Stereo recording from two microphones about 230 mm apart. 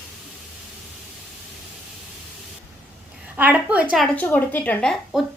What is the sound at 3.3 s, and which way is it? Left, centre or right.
Speech, centre.